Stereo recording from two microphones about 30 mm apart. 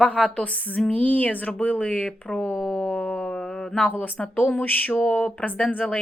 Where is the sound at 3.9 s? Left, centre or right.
Left.